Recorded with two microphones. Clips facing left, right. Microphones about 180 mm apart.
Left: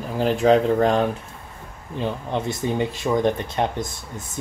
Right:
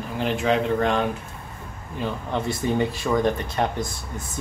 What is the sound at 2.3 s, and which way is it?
Speech, 20° left (ahead or behind).